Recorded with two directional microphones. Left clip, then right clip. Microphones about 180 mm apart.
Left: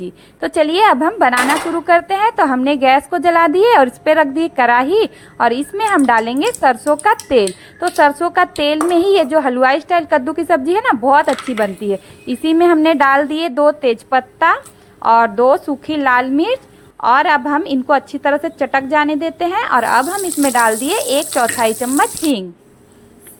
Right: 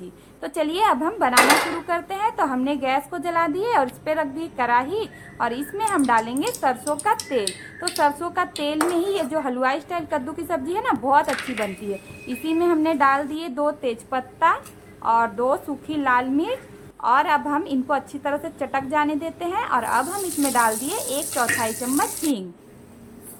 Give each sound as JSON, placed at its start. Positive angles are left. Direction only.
{"t": 0.0, "sound": "a woman's voice", "side_deg": 35}